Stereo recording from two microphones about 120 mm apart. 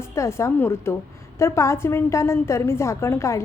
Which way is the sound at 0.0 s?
25° left (ahead or behind).